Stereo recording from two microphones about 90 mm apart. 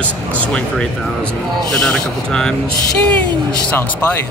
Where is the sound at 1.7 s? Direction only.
5° left (ahead or behind).